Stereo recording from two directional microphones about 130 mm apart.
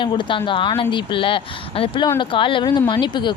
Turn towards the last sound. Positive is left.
turn(degrees=35)  # may be behind; listen again after turning